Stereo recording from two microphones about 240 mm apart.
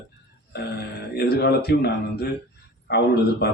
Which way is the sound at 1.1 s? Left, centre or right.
Left.